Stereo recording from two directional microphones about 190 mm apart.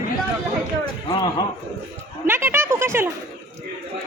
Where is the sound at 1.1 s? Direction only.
20° left (ahead or behind).